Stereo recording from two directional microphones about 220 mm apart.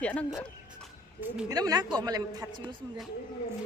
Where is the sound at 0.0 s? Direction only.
5° left (ahead or behind).